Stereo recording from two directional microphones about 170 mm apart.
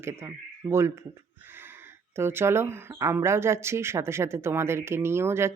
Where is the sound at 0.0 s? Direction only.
15° right (ahead or behind).